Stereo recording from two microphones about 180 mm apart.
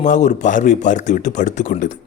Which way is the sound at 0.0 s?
40° left (ahead or behind).